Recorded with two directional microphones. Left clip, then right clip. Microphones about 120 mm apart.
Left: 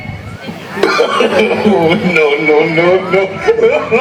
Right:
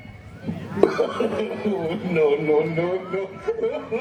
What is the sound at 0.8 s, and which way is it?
Speech, 30° left (ahead or behind).